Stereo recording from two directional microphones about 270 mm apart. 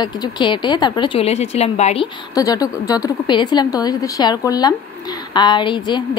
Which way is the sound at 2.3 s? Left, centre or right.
Centre.